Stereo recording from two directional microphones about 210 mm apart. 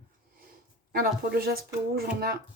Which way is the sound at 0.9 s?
45° right (ahead or behind).